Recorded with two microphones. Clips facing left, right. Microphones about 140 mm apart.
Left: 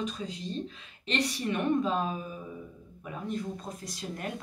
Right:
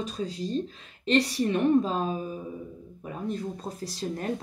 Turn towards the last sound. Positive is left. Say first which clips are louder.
# right 5 dB
turn(degrees=-30)  # may be behind; listen again after turning